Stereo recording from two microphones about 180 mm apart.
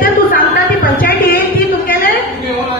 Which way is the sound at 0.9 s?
55° left (ahead or behind).